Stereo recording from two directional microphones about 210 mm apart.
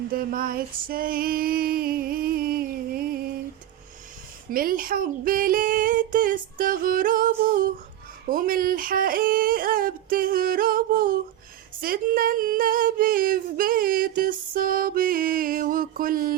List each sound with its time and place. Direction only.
0.1 s female singing: 45° right (ahead or behind)
4.5 s female singing: 45° right (ahead or behind)